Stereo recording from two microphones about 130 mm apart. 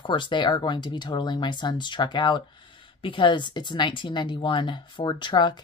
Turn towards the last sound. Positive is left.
turn(degrees=35)  # may be behind; listen again after turning